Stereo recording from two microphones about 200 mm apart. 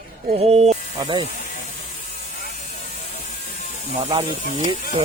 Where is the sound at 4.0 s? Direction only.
25° right (ahead or behind).